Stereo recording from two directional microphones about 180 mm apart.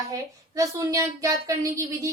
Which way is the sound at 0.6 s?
20° right (ahead or behind).